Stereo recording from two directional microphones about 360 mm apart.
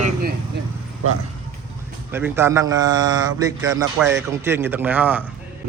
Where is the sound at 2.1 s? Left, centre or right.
Centre.